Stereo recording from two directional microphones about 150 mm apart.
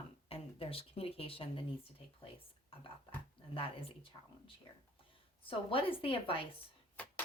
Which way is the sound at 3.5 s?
40° left (ahead or behind).